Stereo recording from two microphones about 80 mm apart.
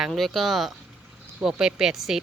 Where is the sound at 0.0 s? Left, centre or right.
Centre.